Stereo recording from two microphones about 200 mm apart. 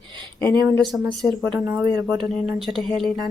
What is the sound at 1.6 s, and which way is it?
Speech, 20° right (ahead or behind).